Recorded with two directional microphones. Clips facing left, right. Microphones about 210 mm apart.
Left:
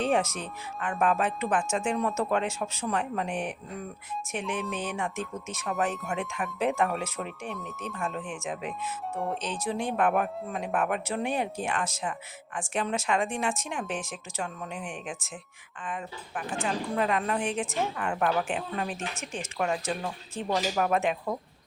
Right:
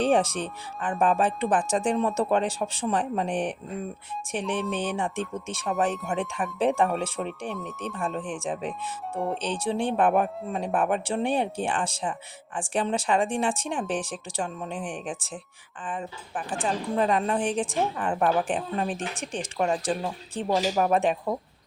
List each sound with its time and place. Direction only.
0.1 s speech: 30° right (ahead or behind)
7.3 s speech: centre (ahead or behind)
7.9 s speech: 30° right (ahead or behind)
9.1 s speech: centre (ahead or behind)
9.4 s speech: 30° right (ahead or behind)